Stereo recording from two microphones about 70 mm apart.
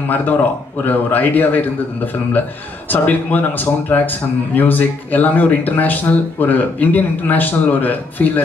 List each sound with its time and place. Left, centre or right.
0.1 s a man's voice: left
2.9 s a man's voice: left